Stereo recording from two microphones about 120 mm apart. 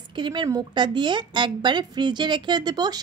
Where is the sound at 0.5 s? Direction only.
35° right (ahead or behind).